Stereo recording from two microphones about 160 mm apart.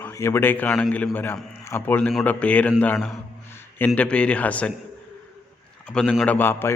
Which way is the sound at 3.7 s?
10° left (ahead or behind).